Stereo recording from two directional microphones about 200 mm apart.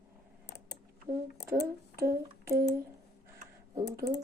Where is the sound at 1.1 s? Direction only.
20° right (ahead or behind).